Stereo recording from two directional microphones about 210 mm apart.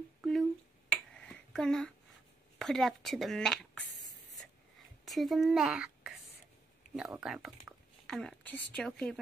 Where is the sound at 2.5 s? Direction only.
Centre (ahead or behind).